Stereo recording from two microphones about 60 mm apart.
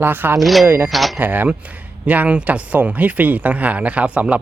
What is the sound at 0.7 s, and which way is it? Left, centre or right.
Speech, right.